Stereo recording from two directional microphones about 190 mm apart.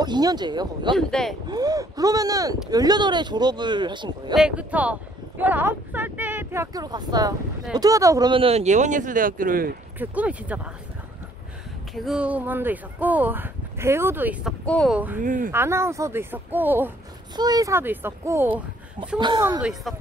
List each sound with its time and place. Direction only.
0.0 s speech: 20° right (ahead or behind)
0.9 s speech: centre (ahead or behind)
1.5 s speech: 20° right (ahead or behind)
4.4 s speech: 5° right (ahead or behind); by 9.8 s 50° right (ahead or behind)
9.9 s speech: 10° right (ahead or behind)
11.9 s speech: centre (ahead or behind)
14.6 s speech: 5° left (ahead or behind)
15.2 s speech: 45° right (ahead or behind)
15.5 s speech: 15° right (ahead or behind)
19.1 s speech: 25° right (ahead or behind)
19.6 s speech: centre (ahead or behind)